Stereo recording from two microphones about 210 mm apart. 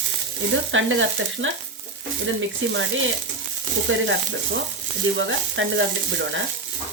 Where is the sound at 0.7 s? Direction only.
65° right (ahead or behind).